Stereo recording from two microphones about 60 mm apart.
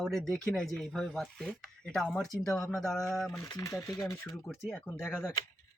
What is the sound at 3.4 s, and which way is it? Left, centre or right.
Speech, left.